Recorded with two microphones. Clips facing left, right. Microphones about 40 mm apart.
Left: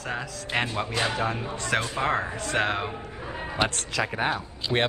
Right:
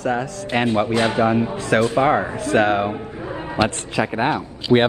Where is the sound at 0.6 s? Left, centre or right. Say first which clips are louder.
Right 13 dB; right.